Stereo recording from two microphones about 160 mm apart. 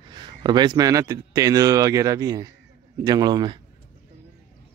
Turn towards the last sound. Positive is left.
turn(degrees=-25)  # may be behind; listen again after turning